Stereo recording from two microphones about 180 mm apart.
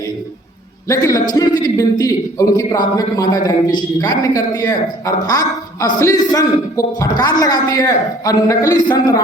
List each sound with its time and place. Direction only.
0.9 s a man's voice: 20° left (ahead or behind)